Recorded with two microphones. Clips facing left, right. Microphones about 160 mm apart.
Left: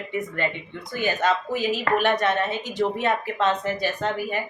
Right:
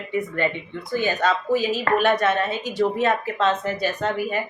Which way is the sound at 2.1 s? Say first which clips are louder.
Right 2 dB; 20° left (ahead or behind).